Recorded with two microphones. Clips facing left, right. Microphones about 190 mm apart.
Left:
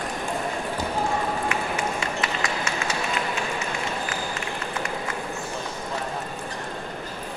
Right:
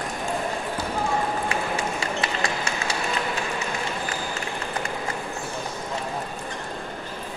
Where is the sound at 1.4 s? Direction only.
30° right (ahead or behind).